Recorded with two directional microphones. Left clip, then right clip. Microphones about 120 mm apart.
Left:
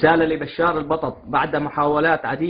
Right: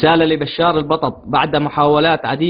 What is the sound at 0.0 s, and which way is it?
A man's voice, 50° right (ahead or behind).